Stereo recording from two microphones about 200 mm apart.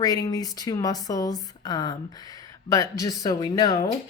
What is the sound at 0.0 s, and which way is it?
Speech, 20° left (ahead or behind).